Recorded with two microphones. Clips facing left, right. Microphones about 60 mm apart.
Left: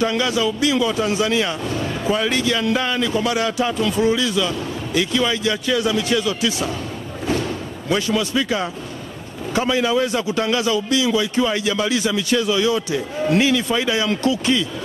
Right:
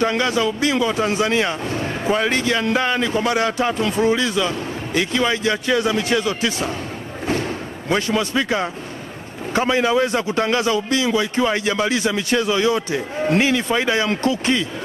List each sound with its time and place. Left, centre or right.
0.0 s speech: right
7.2 s a sound: right
9.5 s speech: right